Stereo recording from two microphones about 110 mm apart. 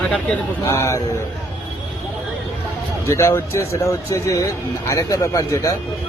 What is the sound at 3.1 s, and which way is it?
Speech, 25° left (ahead or behind).